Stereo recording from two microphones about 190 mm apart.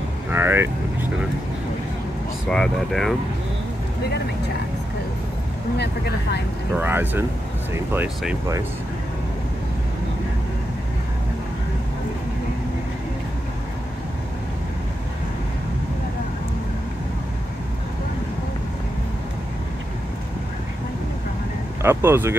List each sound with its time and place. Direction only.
0.3 s speech: 10° right (ahead or behind)
2.5 s speech: centre (ahead or behind)
5.8 s speech: 60° left (ahead or behind)
6.8 s speech: 10° right (ahead or behind)
21.8 s speech: 10° right (ahead or behind)